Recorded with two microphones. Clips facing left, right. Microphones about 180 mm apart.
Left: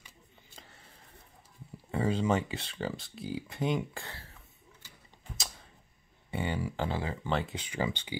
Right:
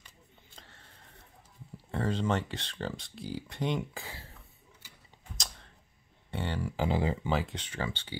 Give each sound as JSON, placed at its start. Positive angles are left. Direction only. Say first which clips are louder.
{"t": 0.6, "sound": "a sound", "louder": "left 2 dB", "side_deg": 5}
{"t": 1.9, "sound": "speech", "louder": "left 2 dB", "side_deg": 5}
{"t": 6.3, "sound": "speech", "louder": "left 1 dB", "side_deg": 5}
{"t": 6.9, "sound": "speech", "louder": "right 5 dB", "side_deg": -20}
{"t": 7.2, "sound": "speech", "louder": "right 1 dB", "side_deg": -5}
{"t": 7.5, "sound": "speech", "louder": "left 3 dB", "side_deg": 10}